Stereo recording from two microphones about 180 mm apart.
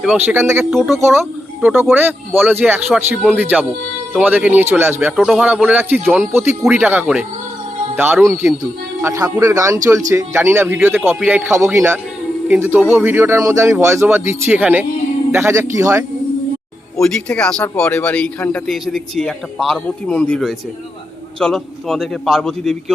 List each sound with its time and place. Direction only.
0.0 s speech: 5° right (ahead or behind)
0.3 s speech: 15° right (ahead or behind)
0.6 s speech: 5° right (ahead or behind)
0.9 s speech: 15° right (ahead or behind)
17.0 s speech: 5° left (ahead or behind)